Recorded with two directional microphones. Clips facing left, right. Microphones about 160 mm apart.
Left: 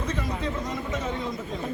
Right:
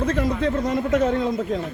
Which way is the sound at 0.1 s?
85° right.